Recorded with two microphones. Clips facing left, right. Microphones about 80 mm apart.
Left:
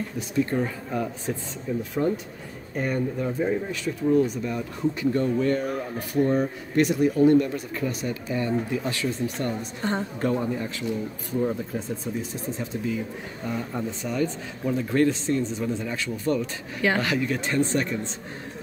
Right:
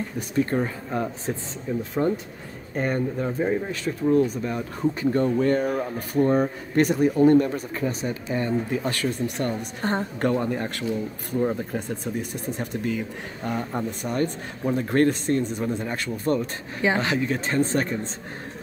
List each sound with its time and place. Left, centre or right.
0.5 s speech: right
8.6 s speech: right
10.5 s speech: right
16.8 s speech: right